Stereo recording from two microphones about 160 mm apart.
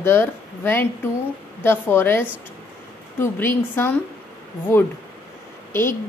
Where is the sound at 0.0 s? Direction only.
15° left (ahead or behind).